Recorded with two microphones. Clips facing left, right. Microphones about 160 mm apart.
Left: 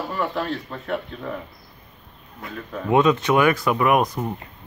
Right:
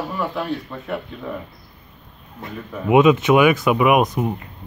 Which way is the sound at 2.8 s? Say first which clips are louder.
Right 4 dB; 20° right (ahead or behind).